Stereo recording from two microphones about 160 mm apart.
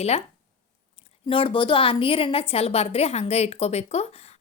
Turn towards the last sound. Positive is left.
turn(degrees=40)  # may be behind; listen again after turning